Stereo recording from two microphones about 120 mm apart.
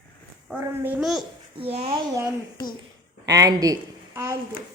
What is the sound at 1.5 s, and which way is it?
Speech, 60° right (ahead or behind).